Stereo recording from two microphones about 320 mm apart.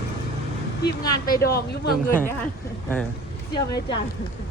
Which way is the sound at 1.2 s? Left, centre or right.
Left.